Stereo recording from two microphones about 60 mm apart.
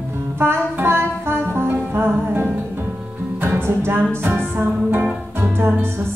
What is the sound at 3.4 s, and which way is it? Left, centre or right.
Music, right.